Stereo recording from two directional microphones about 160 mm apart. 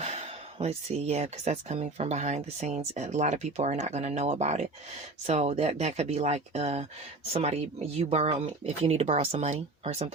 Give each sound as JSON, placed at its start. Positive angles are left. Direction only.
{"t": 0.0, "sound": "speech", "side_deg": -45}